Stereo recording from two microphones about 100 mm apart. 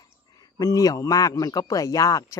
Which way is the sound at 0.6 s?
35° left (ahead or behind).